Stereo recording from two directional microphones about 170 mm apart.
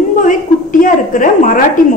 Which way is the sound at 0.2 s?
50° left (ahead or behind).